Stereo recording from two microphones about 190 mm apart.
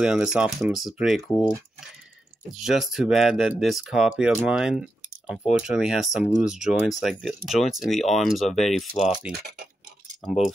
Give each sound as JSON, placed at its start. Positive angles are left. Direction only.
{"t": 0.0, "sound": "speech", "side_deg": -5}
{"t": 1.3, "sound": "speech", "side_deg": 20}
{"t": 2.5, "sound": "speech", "side_deg": 0}
{"t": 10.2, "sound": "speech", "side_deg": 0}